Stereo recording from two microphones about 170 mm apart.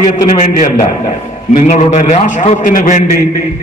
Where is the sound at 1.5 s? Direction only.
45° left (ahead or behind).